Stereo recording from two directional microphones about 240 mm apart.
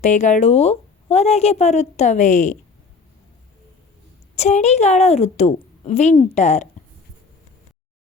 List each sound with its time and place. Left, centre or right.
0.0 s a woman's voice: left
4.4 s a woman's voice: left